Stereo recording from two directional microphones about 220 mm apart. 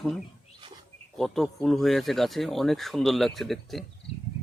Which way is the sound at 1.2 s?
Centre (ahead or behind).